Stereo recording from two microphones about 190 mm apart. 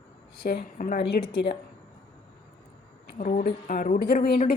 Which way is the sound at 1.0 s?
60° left (ahead or behind).